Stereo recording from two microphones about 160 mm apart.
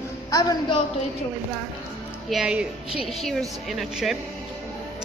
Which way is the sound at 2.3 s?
5° right (ahead or behind).